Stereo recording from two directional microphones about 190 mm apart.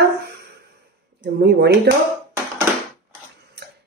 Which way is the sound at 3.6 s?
60° right (ahead or behind).